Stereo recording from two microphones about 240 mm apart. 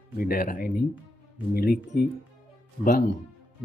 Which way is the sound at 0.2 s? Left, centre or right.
Left.